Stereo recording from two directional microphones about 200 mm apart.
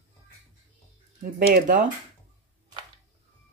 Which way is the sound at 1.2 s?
40° right (ahead or behind).